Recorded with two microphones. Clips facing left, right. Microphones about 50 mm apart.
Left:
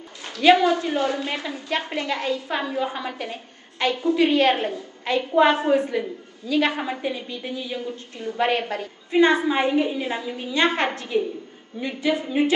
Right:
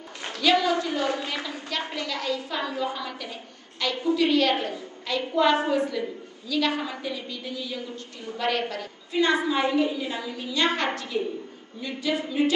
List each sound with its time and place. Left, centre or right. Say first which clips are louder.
0.4 s a woman's voice: left 6 dB; left